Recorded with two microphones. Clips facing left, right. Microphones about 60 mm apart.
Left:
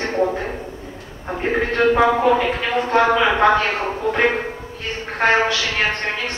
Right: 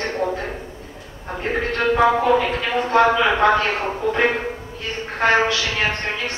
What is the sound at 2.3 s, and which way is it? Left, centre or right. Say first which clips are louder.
A woman's voice: left 1 dB; centre.